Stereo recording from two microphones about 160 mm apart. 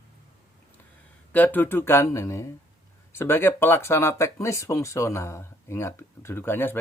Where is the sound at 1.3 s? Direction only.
10° left (ahead or behind).